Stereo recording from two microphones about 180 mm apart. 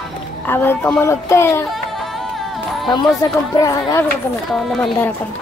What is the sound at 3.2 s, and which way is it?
Speech, 20° left (ahead or behind).